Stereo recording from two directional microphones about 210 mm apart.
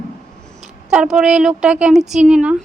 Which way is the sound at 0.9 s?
5° right (ahead or behind).